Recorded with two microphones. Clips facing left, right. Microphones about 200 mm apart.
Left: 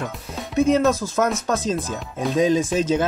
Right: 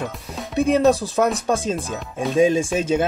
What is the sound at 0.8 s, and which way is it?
Speech, 30° right (ahead or behind).